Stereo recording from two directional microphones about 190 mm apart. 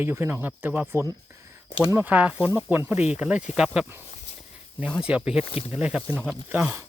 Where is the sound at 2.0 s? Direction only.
5° right (ahead or behind).